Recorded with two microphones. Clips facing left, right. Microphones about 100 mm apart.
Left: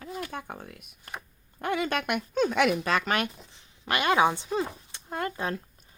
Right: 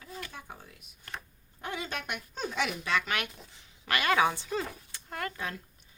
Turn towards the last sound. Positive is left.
turn(degrees=30)  # may be behind; listen again after turning